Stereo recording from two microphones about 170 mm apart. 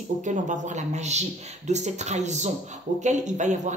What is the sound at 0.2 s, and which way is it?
Speech, 45° right (ahead or behind).